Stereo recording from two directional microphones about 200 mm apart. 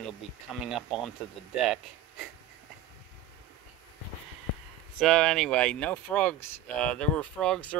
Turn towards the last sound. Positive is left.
turn(degrees=5)  # may be behind; listen again after turning